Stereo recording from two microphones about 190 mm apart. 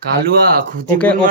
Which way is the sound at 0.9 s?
5° left (ahead or behind).